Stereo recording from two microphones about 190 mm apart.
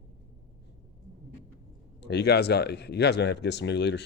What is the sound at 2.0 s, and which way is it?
Speech, 60° left (ahead or behind).